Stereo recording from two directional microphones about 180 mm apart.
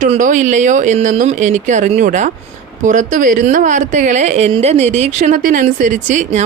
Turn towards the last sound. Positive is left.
turn(degrees=-45)  # may be behind; listen again after turning